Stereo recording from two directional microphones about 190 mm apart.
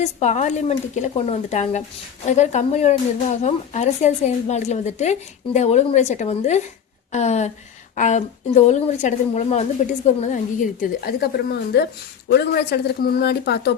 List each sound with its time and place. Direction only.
0.0 s a woman's voice: 35° left (ahead or behind); by 13.7 s 60° left (ahead or behind)